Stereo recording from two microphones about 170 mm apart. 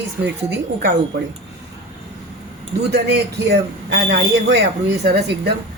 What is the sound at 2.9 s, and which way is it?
A man's voice, 90° right.